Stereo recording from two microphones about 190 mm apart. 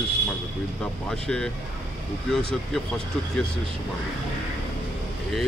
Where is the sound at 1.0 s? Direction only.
5° left (ahead or behind).